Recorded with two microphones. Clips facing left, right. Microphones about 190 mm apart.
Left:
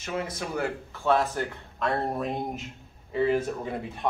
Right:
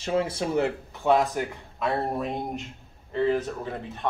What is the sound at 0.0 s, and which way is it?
Speech, 30° right (ahead or behind).